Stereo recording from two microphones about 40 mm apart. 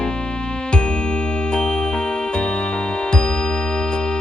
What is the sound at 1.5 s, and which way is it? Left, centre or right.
Music, left.